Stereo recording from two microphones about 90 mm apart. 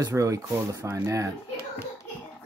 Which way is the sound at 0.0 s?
35° right (ahead or behind).